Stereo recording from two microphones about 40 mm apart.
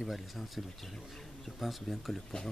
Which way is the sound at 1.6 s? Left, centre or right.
Centre.